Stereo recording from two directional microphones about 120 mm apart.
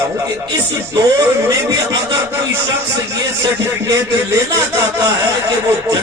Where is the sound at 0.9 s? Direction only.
25° right (ahead or behind).